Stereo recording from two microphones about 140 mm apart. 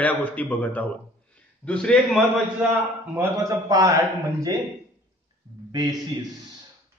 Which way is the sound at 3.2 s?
20° right (ahead or behind).